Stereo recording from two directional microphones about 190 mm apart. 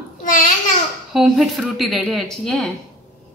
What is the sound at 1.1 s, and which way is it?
A woman's voice, centre (ahead or behind).